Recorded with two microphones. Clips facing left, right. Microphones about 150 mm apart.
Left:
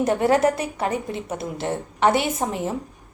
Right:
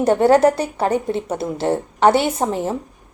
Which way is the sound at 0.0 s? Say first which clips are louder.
Right 5 dB; 30° right (ahead or behind).